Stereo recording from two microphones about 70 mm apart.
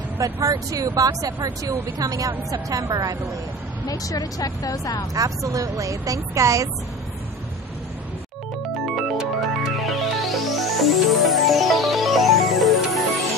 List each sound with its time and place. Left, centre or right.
0.2 s speech: right
3.8 s speech: left
5.1 s a woman's voice: right
8.8 s music: centre